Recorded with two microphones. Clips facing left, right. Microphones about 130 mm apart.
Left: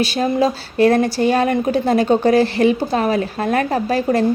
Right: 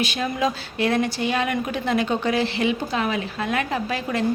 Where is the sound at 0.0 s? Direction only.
35° left (ahead or behind).